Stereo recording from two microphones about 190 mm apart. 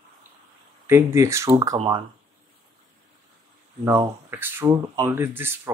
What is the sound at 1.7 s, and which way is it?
Speech, 25° right (ahead or behind).